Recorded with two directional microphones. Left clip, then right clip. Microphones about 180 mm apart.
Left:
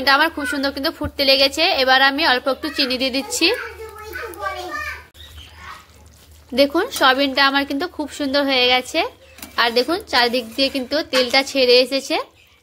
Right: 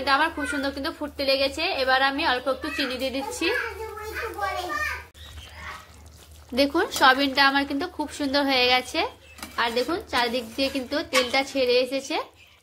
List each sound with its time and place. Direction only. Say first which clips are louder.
0.0 s a woman's voice: left 6 dB; 35° left (ahead or behind)
6.5 s a woman's voice: left 6 dB; 20° left (ahead or behind)
9.6 s a woman's voice: left 7 dB; 30° left (ahead or behind)